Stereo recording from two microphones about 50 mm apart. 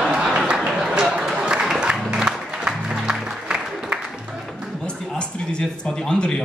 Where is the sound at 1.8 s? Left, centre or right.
Centre.